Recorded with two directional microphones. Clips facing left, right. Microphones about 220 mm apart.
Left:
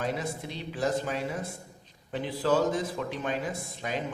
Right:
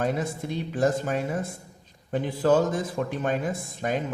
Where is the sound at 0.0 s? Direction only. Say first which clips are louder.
Right 5 dB; 50° right (ahead or behind).